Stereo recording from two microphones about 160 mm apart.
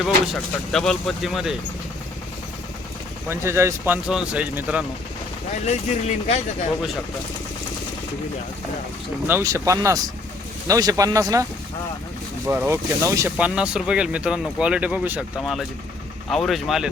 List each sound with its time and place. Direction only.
0.0 s speech: centre (ahead or behind)
3.2 s speech: 15° right (ahead or behind)
5.6 s speech: 45° left (ahead or behind)
9.2 s speech: 15° right (ahead or behind)
12.5 s speech: 15° right (ahead or behind)
13.3 s speech: 5° right (ahead or behind)